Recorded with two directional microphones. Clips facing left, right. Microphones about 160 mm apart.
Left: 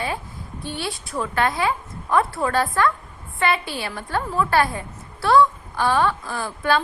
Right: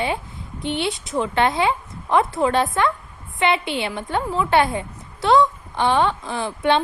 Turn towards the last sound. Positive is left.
turn(degrees=-20)  # may be behind; listen again after turning